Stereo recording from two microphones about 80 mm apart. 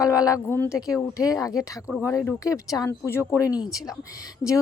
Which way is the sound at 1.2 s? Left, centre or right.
Left.